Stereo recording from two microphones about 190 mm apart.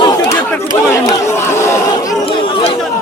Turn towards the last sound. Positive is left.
turn(degrees=15)  # may be behind; listen again after turning